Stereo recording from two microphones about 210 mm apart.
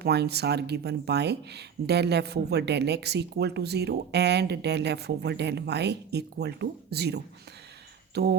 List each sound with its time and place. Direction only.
0.0 s speech: 50° right (ahead or behind)